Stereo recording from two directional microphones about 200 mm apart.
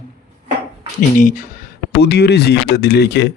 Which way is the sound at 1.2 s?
40° left (ahead or behind).